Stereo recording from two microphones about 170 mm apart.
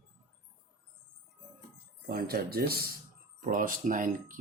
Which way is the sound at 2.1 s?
60° right (ahead or behind).